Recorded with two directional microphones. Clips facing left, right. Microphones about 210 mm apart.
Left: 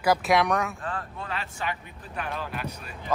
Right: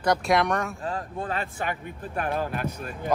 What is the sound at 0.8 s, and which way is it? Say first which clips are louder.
Speech: right 4 dB; 45° right (ahead or behind).